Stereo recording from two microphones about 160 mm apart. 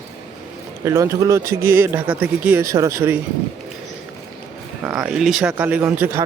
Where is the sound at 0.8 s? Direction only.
20° right (ahead or behind).